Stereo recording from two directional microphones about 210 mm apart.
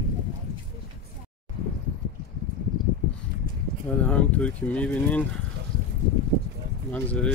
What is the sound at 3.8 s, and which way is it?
Speech, 5° left (ahead or behind).